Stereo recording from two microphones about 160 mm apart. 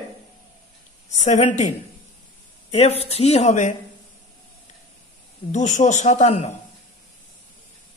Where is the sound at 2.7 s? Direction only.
40° left (ahead or behind).